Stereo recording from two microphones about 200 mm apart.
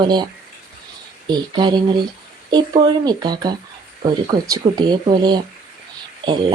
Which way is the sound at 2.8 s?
20° right (ahead or behind).